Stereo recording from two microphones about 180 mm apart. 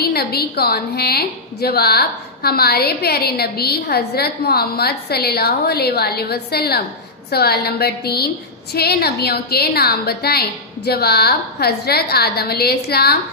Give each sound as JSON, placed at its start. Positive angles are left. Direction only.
{"t": 0.0, "sound": "a woman's voice", "side_deg": 60}